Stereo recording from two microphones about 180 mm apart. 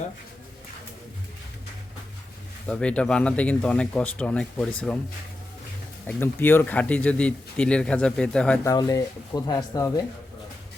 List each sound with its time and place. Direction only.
2.6 s speech: 5° left (ahead or behind)
6.1 s speech: 10° left (ahead or behind)
8.6 s speech: 20° left (ahead or behind)